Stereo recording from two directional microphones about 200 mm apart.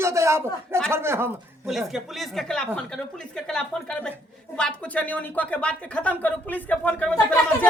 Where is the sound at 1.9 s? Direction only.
Centre (ahead or behind).